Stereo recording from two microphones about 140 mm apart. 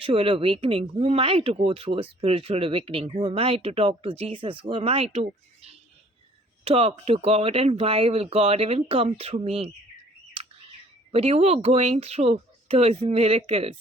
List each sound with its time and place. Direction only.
0.0 s speech: 40° right (ahead or behind)
10.4 s bird: 40° right (ahead or behind)
11.1 s speech: 45° right (ahead or behind)